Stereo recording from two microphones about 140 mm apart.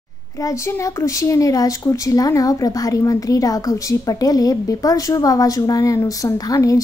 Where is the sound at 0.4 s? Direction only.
25° left (ahead or behind).